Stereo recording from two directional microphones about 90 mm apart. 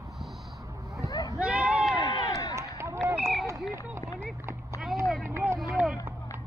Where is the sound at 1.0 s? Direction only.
40° left (ahead or behind).